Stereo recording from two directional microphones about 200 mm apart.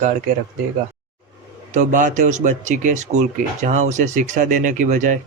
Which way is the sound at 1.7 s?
40° right (ahead or behind).